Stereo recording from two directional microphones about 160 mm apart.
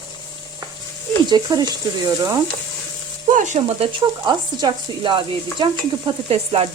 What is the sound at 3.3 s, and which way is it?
Stir, 50° right (ahead or behind).